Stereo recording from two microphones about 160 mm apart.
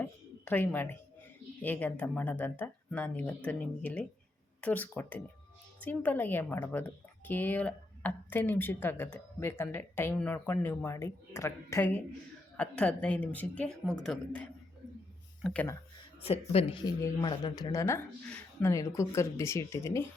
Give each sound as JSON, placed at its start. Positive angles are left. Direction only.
{"t": 0.0, "sound": "a sound", "side_deg": 10}
{"t": 1.6, "sound": "speech", "side_deg": 10}
{"t": 16.2, "sound": "speech", "side_deg": 35}
{"t": 16.8, "sound": "speech", "side_deg": 25}